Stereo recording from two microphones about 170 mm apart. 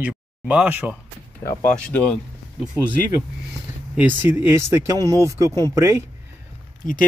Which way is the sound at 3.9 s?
10° right (ahead or behind).